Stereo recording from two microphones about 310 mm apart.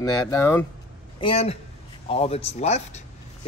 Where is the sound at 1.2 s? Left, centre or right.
Centre.